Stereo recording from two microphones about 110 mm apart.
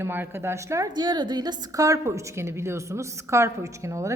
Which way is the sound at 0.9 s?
40° right (ahead or behind).